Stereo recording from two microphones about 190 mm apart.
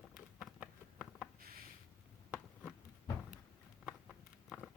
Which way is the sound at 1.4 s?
50° right (ahead or behind).